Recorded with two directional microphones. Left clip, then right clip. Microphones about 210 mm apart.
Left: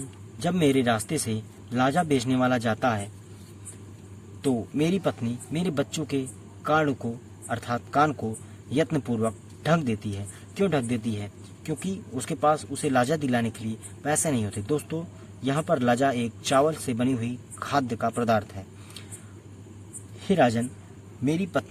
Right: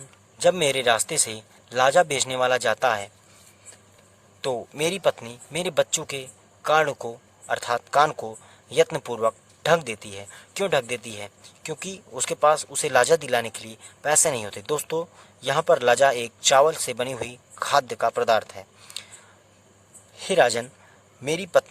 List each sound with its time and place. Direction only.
0.3 s speech: 30° right (ahead or behind)
4.4 s speech: 35° right (ahead or behind)
20.2 s speech: 35° right (ahead or behind)